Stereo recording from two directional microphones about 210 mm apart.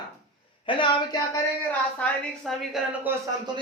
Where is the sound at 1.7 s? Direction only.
5° left (ahead or behind).